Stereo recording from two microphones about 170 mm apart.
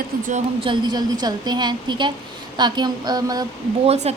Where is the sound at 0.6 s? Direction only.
25° right (ahead or behind).